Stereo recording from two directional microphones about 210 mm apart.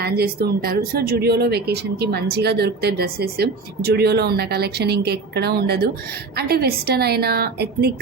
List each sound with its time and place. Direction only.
0.0 s speech: 50° right (ahead or behind)